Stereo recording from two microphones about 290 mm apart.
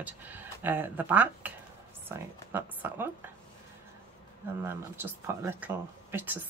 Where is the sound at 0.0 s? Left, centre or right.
Centre.